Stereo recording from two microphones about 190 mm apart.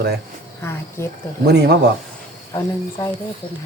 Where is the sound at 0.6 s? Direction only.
15° left (ahead or behind).